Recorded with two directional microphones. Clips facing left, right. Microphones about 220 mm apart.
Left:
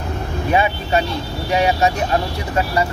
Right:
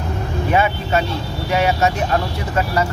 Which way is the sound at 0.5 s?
15° left (ahead or behind).